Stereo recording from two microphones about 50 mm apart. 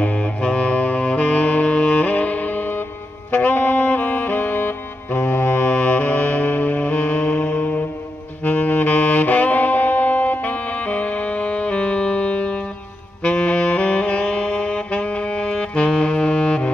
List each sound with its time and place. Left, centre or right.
0.0 s saxophone: left
5.7 s music: left
8.5 s saxophone: left